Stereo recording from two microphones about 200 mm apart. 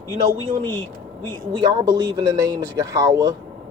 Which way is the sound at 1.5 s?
20° right (ahead or behind).